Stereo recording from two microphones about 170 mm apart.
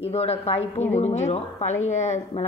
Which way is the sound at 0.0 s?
35° left (ahead or behind).